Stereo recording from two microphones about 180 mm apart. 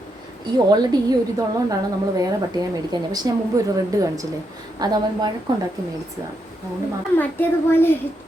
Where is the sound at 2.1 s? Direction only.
20° right (ahead or behind).